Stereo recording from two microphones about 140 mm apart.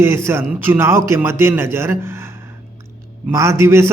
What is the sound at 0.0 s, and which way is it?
A man's voice, 20° right (ahead or behind).